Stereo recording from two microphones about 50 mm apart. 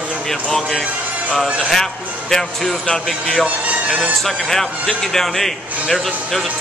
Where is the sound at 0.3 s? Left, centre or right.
Centre.